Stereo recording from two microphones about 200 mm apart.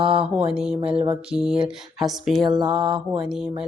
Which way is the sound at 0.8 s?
30° right (ahead or behind).